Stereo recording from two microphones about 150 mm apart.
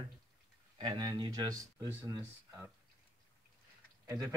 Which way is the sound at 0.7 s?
30° right (ahead or behind).